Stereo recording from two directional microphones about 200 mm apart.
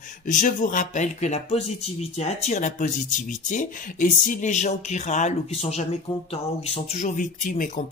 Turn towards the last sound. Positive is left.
turn(degrees=40)  # may be behind; listen again after turning